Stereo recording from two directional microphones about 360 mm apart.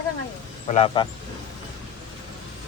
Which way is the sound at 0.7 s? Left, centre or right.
Centre.